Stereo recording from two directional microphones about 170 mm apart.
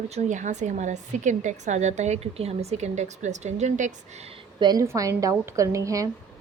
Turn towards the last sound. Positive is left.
turn(degrees=-20)  # may be behind; listen again after turning